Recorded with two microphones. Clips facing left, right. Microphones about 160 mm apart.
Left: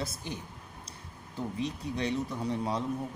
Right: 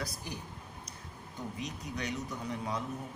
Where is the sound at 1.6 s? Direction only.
30° left (ahead or behind).